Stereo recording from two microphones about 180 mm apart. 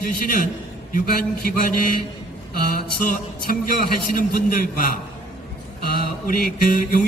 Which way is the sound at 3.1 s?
55° left (ahead or behind).